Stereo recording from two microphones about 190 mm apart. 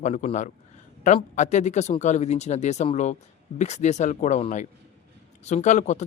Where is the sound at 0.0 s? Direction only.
40° left (ahead or behind).